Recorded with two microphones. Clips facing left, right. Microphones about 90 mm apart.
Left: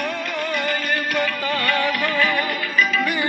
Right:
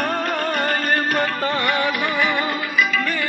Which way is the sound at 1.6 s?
20° right (ahead or behind).